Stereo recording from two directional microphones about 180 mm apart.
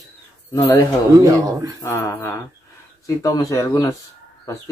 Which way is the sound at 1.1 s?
20° right (ahead or behind).